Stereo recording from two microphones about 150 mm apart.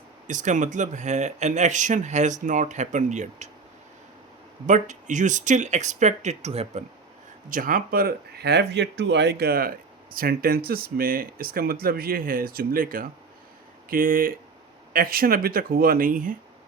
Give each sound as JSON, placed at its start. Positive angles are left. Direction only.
{"t": 0.3, "sound": "speech", "side_deg": -55}
{"t": 4.6, "sound": "speech", "side_deg": -55}
{"t": 7.5, "sound": "speech", "side_deg": -65}